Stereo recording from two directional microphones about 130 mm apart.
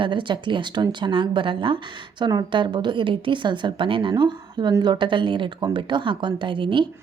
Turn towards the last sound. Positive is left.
turn(degrees=-40)  # may be behind; listen again after turning